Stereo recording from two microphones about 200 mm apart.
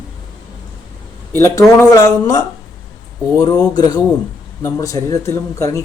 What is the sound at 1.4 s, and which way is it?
Speech, 15° left (ahead or behind).